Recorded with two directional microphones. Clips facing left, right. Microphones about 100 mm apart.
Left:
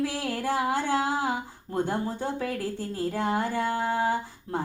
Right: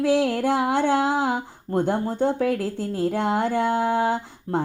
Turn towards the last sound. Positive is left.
turn(degrees=-65)  # may be behind; listen again after turning